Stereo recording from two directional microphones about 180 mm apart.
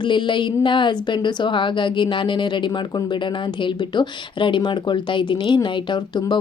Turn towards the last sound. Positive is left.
turn(degrees=25)  # may be behind; listen again after turning